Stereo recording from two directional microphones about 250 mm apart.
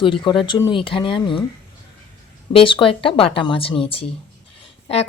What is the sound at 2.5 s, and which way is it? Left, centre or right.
Speech, left.